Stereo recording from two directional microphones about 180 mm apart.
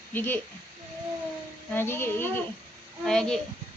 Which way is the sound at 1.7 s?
10° left (ahead or behind).